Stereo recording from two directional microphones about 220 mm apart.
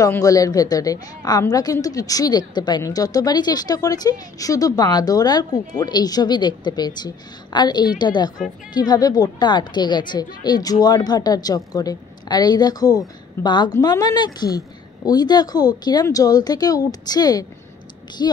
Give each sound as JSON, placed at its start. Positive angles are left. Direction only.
{"t": 0.0, "sound": "a woman's voice", "side_deg": 15}